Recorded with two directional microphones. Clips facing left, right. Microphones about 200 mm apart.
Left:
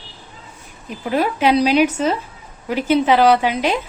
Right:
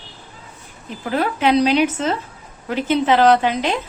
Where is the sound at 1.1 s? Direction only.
10° left (ahead or behind).